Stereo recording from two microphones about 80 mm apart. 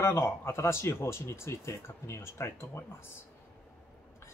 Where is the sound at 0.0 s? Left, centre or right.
Left.